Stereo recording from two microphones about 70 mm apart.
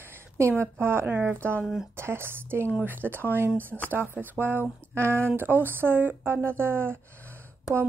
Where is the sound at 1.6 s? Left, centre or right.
Centre.